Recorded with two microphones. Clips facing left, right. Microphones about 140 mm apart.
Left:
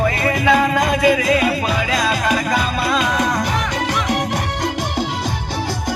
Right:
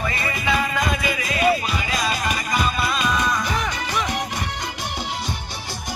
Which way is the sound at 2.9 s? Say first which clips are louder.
Left 4 dB; 90° left.